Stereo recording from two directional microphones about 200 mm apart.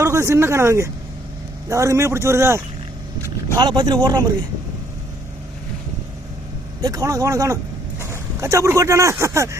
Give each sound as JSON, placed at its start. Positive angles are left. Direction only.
{"t": 0.0, "sound": "a man's voice", "side_deg": -15}
{"t": 6.8, "sound": "a man's voice", "side_deg": -15}